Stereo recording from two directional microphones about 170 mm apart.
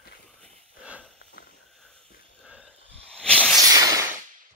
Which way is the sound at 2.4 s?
5° right (ahead or behind).